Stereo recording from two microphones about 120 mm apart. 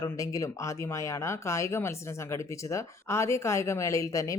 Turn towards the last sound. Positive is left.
turn(degrees=25)  # may be behind; listen again after turning